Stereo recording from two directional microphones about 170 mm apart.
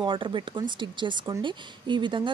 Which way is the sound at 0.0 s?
30° right (ahead or behind).